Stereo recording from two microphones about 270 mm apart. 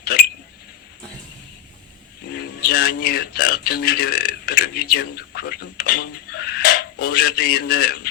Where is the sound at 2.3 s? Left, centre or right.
Left.